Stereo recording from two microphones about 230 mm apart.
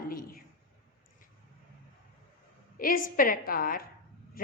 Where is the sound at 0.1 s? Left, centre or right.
Left.